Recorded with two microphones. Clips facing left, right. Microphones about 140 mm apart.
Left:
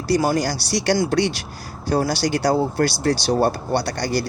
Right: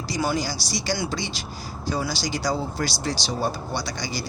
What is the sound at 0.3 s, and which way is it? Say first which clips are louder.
Speech: left 6 dB; 60° left (ahead or behind).